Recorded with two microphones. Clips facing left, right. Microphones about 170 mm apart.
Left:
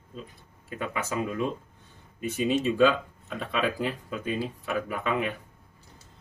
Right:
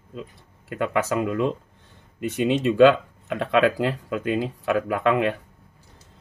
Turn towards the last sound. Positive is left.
turn(degrees=-85)